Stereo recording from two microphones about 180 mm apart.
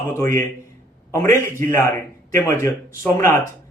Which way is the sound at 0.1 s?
15° left (ahead or behind).